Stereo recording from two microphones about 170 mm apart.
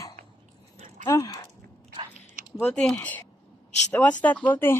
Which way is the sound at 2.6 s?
5° left (ahead or behind).